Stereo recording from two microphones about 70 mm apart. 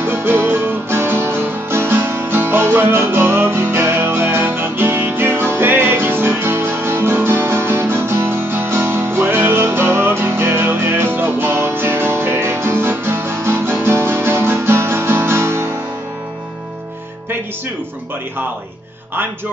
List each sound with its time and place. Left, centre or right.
0.0 s music: right